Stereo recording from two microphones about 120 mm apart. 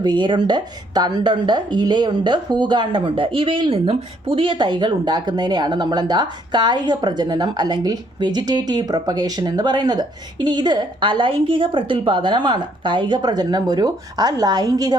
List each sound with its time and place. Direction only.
0.0 s a woman's voice: 40° right (ahead or behind)